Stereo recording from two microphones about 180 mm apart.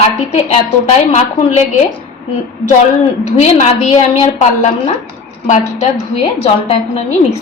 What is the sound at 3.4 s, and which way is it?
A woman's voice, 40° left (ahead or behind).